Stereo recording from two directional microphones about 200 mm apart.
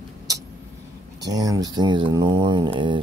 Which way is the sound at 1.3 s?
20° right (ahead or behind).